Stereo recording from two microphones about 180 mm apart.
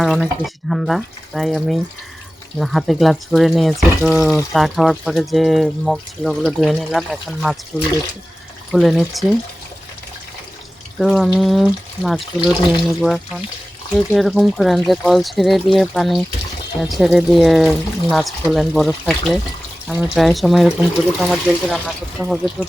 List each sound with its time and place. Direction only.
0.0 s speech: centre (ahead or behind)
11.0 s speech: centre (ahead or behind)